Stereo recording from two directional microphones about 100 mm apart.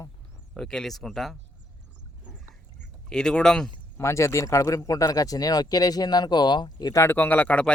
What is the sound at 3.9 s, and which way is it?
Speech, 30° left (ahead or behind).